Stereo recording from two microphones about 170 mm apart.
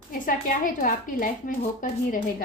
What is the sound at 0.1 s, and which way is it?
A woman's voice, 55° left (ahead or behind).